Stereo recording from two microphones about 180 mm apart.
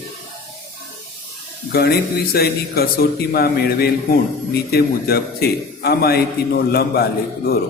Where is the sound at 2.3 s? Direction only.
60° left (ahead or behind).